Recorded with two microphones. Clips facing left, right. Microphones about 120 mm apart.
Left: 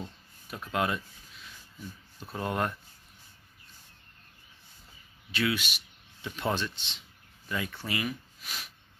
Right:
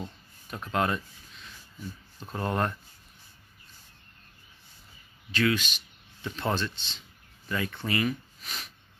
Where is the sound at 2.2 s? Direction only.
10° left (ahead or behind).